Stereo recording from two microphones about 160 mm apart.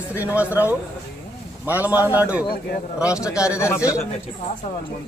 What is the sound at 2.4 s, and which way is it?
Speech, 75° left (ahead or behind).